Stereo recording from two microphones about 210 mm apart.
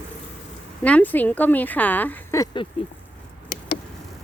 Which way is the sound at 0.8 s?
5° left (ahead or behind).